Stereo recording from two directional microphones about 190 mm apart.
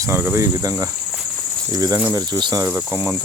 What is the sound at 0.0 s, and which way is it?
Speech, 15° right (ahead or behind).